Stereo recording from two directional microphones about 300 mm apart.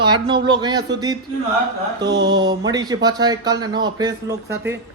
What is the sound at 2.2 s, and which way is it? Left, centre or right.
Speech, centre.